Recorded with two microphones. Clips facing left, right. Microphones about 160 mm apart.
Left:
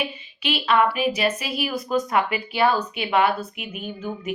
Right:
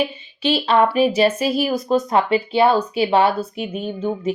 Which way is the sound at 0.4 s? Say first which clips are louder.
Right 4 dB; 30° right (ahead or behind).